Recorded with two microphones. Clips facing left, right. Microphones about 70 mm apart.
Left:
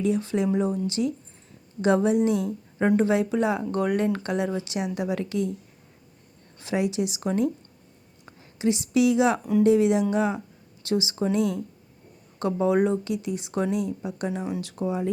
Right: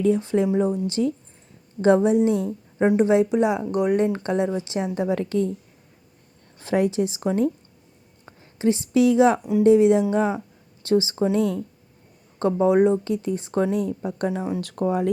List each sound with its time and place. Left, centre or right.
0.0 s speech: right
6.6 s speech: right
13.1 s speech: right
14.6 s speech: right